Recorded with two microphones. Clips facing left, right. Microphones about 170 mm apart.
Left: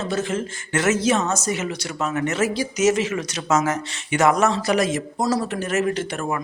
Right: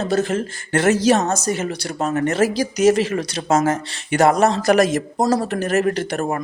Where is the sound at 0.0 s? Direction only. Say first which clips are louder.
Right 4 dB; 40° right (ahead or behind).